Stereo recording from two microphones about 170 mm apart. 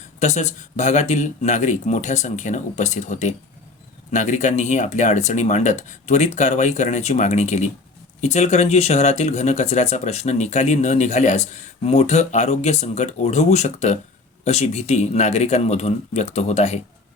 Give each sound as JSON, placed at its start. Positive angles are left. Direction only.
{"t": 0.2, "sound": "speech", "side_deg": 45}